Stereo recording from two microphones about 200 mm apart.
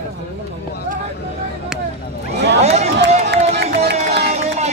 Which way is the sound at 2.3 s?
55° right (ahead or behind).